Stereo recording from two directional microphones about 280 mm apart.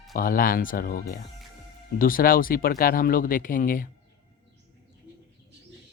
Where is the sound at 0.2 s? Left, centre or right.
Left.